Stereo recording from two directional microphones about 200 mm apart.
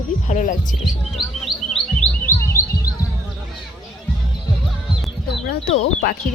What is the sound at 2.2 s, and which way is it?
Chirp, 10° left (ahead or behind).